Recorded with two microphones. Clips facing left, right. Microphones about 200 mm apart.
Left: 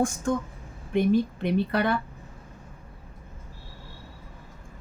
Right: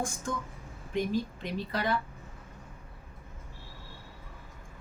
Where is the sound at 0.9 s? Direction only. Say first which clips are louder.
Left 8 dB; 60° left (ahead or behind).